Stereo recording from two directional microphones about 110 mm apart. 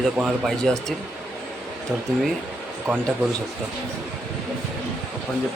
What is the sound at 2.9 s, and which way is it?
Speech, 5° right (ahead or behind).